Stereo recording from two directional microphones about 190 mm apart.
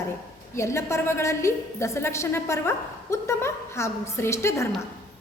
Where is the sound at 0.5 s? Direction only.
15° left (ahead or behind).